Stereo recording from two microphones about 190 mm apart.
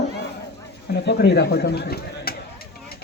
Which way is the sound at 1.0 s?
60° left (ahead or behind).